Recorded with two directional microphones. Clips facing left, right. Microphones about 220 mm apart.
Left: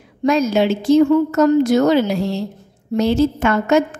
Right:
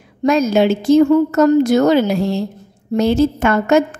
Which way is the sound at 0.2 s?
50° right (ahead or behind).